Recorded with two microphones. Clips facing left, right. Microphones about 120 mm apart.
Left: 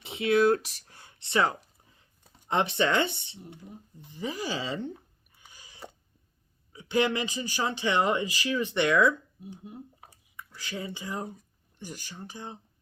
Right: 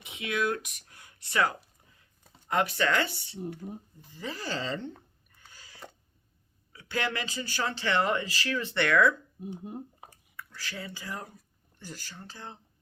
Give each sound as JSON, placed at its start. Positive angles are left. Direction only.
{"t": 0.0, "sound": "speech", "side_deg": 30}
{"t": 3.6, "sound": "speech", "side_deg": -45}
{"t": 4.1, "sound": "speech", "side_deg": 15}
{"t": 5.3, "sound": "a sound", "side_deg": 15}
{"t": 6.7, "sound": "speech", "side_deg": 20}
{"t": 9.7, "sound": "speech", "side_deg": -45}
{"t": 10.3, "sound": "speech", "side_deg": 20}